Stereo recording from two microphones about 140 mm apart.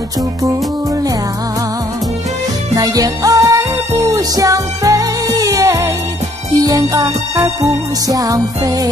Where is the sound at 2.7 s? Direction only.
25° right (ahead or behind).